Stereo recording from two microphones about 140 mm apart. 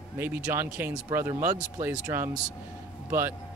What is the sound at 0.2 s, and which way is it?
A man's voice, 15° right (ahead or behind).